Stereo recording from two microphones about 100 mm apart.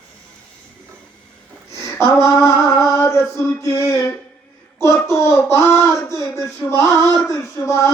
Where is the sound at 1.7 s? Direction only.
30° left (ahead or behind).